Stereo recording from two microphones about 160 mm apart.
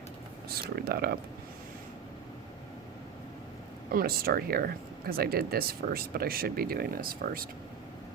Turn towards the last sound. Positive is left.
turn(degrees=-65)  # may be behind; listen again after turning